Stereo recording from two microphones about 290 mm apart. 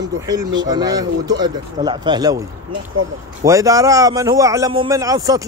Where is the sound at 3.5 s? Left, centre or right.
Centre.